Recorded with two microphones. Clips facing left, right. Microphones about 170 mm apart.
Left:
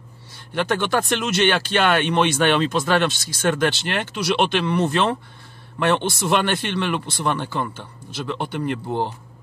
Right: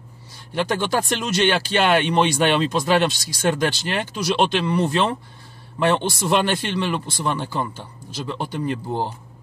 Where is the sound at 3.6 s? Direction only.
60° left (ahead or behind).